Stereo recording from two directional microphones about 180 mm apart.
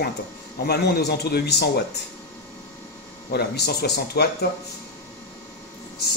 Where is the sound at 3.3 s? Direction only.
65° left (ahead or behind).